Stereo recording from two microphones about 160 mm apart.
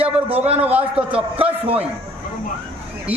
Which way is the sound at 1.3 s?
35° right (ahead or behind).